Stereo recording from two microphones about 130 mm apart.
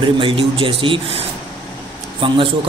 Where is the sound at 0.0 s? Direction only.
45° right (ahead or behind).